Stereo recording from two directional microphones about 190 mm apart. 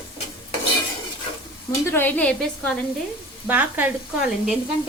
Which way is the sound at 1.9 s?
10° left (ahead or behind).